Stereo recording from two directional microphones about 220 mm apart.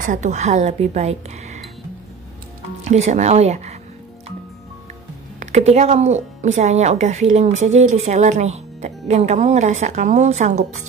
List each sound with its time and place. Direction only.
0.0 s speech: 35° right (ahead or behind)
2.8 s speech: 30° right (ahead or behind)
5.4 s speech: 30° right (ahead or behind)